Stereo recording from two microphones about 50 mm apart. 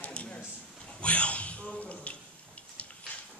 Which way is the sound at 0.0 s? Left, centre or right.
Left.